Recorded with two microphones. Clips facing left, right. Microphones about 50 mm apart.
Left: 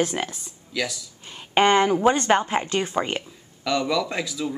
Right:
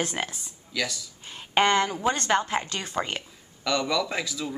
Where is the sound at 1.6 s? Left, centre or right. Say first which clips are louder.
Left 7 dB; centre.